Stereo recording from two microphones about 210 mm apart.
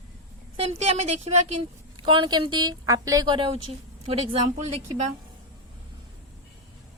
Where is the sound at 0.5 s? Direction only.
30° right (ahead or behind).